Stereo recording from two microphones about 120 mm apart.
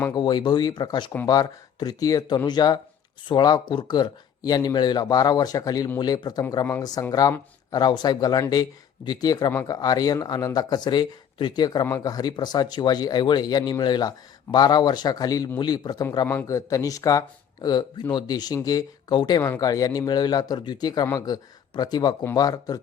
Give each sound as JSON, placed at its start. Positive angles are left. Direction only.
{"t": 0.1, "sound": "speech", "side_deg": 35}
{"t": 16.2, "sound": "a man's voice", "side_deg": 15}